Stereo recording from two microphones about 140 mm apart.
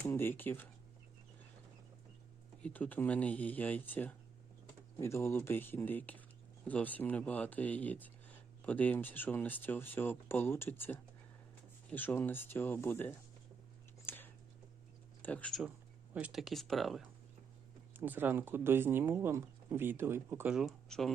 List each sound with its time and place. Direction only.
0.0 s speech: 15° left (ahead or behind)
2.6 s speech: 10° left (ahead or behind)
14.0 s a sound: 15° left (ahead or behind)
15.2 s speech: 10° left (ahead or behind)
16.1 s speech: 5° right (ahead or behind)
17.9 s speech: 15° right (ahead or behind)